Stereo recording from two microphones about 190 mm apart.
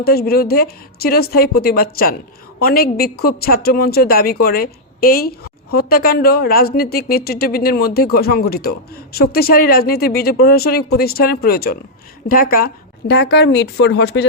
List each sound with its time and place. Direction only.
0.0 s a woman's voice: 55° left (ahead or behind)